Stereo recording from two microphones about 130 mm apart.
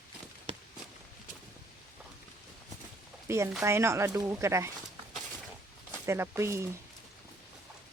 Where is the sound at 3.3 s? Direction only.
20° right (ahead or behind).